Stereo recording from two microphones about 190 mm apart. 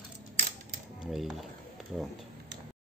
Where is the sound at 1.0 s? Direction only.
Centre (ahead or behind).